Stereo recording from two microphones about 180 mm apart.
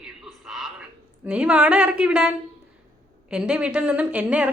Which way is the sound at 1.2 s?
5° right (ahead or behind).